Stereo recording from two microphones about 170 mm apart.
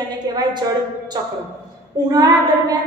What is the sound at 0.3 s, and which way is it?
Speech, 25° right (ahead or behind).